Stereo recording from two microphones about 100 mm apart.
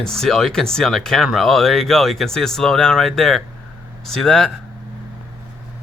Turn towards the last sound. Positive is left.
turn(degrees=5)  # may be behind; listen again after turning